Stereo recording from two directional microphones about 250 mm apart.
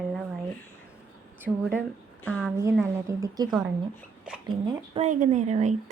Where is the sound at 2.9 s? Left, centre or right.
Centre.